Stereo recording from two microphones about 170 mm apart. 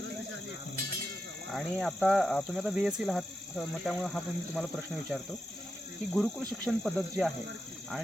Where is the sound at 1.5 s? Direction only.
Centre (ahead or behind).